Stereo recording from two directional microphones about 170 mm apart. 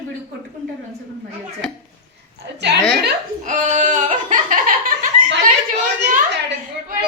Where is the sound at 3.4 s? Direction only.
45° right (ahead or behind).